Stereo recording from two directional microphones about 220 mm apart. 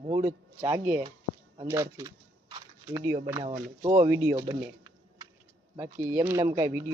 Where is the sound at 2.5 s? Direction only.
20° right (ahead or behind).